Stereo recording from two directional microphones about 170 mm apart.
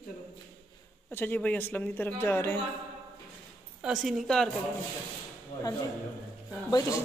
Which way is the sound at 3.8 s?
Centre (ahead or behind).